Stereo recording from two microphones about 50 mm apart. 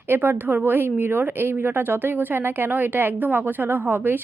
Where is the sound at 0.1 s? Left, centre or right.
Right.